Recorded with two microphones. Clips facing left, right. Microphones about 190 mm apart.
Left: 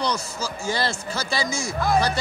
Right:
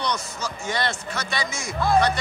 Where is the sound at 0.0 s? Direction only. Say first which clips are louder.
Left 2 dB; 30° left (ahead or behind).